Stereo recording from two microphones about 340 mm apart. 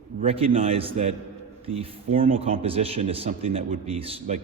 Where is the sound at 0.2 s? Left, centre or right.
Centre.